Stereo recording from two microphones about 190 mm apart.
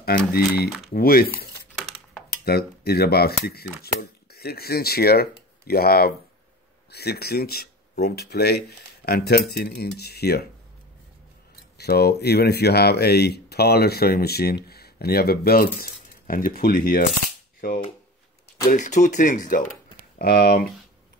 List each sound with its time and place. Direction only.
0.0 s speech: 55° left (ahead or behind)
11.8 s speech: 55° left (ahead or behind)
20.2 s speech: 55° left (ahead or behind)